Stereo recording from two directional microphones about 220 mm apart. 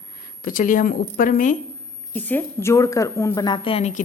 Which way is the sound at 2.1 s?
10° left (ahead or behind).